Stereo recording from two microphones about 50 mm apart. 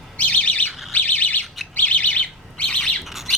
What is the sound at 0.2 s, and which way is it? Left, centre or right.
Squawk, left.